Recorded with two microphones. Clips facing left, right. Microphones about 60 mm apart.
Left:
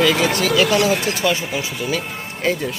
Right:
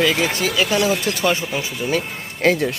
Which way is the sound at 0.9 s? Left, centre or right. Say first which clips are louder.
Left 1 dB; left.